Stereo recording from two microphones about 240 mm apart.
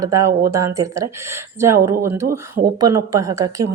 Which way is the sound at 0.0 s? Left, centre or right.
Centre.